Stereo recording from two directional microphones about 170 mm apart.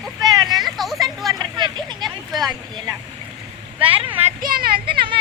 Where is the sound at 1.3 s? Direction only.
25° right (ahead or behind).